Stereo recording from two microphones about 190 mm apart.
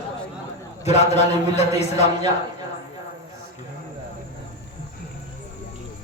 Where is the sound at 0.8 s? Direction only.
35° left (ahead or behind).